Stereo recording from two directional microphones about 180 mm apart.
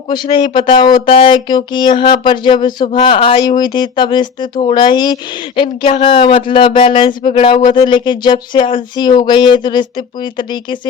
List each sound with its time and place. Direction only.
0.1 s speech: 25° left (ahead or behind)